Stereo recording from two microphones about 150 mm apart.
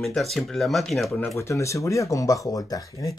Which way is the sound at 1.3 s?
20° left (ahead or behind).